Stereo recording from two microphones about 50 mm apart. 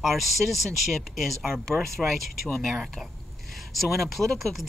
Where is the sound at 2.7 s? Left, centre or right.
Centre.